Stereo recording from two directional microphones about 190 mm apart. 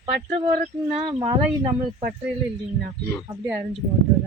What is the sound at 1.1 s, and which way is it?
Speech, 30° right (ahead or behind).